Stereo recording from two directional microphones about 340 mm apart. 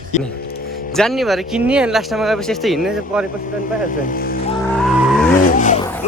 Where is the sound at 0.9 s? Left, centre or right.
Centre.